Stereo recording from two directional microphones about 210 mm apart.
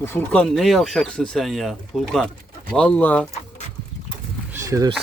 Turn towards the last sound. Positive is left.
turn(degrees=-15)  # may be behind; listen again after turning